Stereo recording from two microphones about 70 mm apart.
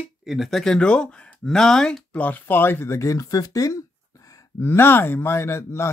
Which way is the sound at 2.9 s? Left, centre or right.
Left.